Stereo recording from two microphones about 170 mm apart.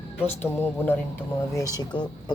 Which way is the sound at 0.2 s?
15° left (ahead or behind).